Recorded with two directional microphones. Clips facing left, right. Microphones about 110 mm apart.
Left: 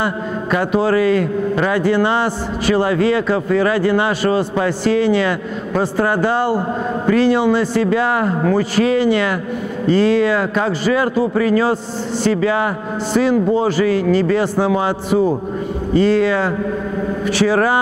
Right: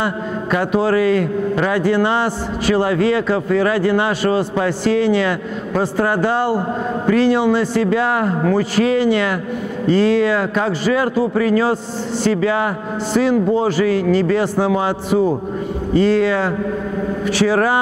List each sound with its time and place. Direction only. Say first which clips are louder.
0.0 s a man's voice: left 1 dB; 25° left (ahead or behind)